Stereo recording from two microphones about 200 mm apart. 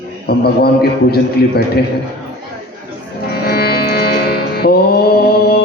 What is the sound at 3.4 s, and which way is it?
Music, 50° left (ahead or behind).